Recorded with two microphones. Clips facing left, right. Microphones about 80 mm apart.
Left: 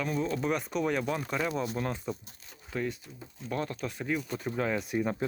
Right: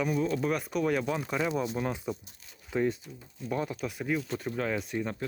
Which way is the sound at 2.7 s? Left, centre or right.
Right.